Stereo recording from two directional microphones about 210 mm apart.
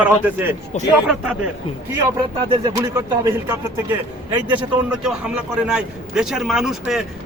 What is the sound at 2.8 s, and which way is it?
Speech, 15° right (ahead or behind).